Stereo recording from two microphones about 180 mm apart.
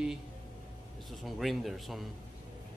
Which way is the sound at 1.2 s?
Centre (ahead or behind).